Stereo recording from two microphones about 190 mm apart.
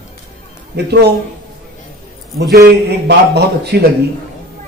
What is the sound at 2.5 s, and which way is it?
A man's voice, 60° right (ahead or behind).